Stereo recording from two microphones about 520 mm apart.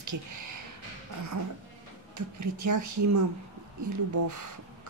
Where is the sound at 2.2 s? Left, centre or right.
Right.